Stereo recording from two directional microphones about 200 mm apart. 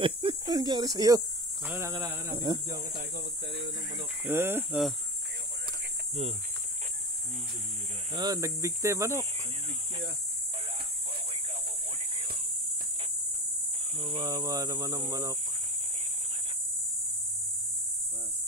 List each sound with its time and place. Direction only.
0.0 s speech: 25° right (ahead or behind)
3.0 s cricket: 55° right (ahead or behind)
4.2 s cricket: 10° right (ahead or behind)
8.1 s snake: 20° right (ahead or behind)
13.9 s speech: 20° right (ahead or behind)